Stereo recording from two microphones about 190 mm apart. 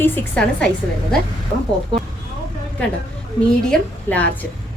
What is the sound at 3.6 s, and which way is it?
Speech, 5° left (ahead or behind).